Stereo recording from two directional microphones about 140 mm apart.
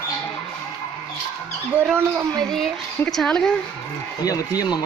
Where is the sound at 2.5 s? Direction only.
5° left (ahead or behind).